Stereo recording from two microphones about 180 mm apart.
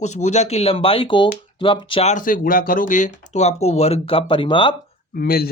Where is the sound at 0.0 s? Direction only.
40° left (ahead or behind).